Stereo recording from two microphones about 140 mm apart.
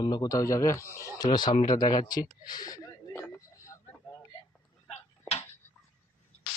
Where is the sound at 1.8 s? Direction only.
30° left (ahead or behind).